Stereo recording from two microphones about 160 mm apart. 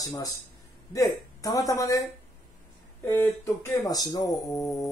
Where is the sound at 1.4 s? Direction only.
20° left (ahead or behind).